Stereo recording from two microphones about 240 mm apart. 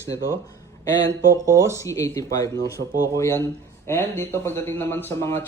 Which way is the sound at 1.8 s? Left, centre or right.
Centre.